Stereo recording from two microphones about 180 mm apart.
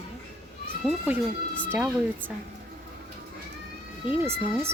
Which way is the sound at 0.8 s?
10° right (ahead or behind).